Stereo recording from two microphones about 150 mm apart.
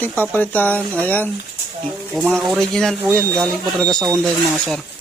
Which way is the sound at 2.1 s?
Centre (ahead or behind).